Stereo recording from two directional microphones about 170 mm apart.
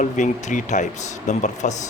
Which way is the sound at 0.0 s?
45° left (ahead or behind).